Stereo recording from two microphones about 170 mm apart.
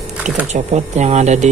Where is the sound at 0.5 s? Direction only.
40° right (ahead or behind).